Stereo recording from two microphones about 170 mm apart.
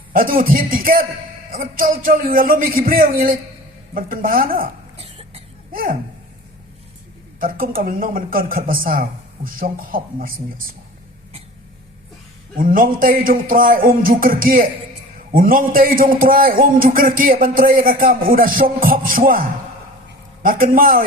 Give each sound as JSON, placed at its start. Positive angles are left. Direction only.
{"t": 0.1, "sound": "a man's voice", "side_deg": -60}
{"t": 4.9, "sound": "cough", "side_deg": -35}
{"t": 5.7, "sound": "speech", "side_deg": -55}
{"t": 7.3, "sound": "a man's voice", "side_deg": -60}
{"t": 12.5, "sound": "a man's voice", "side_deg": -55}